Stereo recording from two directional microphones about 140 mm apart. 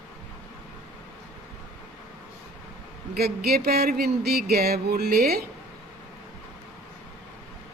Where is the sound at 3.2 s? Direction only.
90° right.